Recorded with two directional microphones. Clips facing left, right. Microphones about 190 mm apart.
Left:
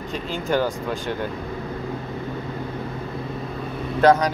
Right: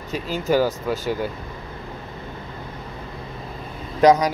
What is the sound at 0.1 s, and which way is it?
Speech, 5° right (ahead or behind).